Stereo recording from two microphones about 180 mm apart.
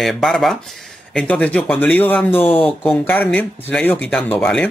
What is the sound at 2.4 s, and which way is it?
Speech, 30° left (ahead or behind).